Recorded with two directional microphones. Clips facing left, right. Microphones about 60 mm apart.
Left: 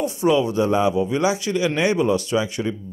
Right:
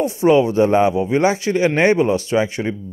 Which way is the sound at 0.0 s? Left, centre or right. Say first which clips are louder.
Right 5 dB; right.